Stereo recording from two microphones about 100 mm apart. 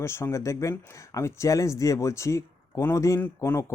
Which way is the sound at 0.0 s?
25° left (ahead or behind).